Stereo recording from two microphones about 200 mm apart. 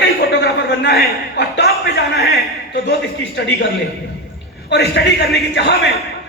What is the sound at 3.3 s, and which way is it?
Speech, 65° left (ahead or behind).